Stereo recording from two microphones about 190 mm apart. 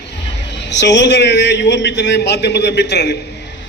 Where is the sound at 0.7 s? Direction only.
65° left (ahead or behind).